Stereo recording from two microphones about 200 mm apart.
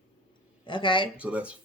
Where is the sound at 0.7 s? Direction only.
25° left (ahead or behind).